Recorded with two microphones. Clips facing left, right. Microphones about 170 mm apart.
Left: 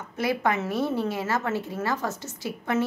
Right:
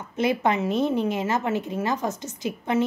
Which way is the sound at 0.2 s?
20° right (ahead or behind).